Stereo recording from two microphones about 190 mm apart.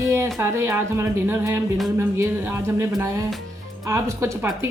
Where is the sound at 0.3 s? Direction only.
15° right (ahead or behind).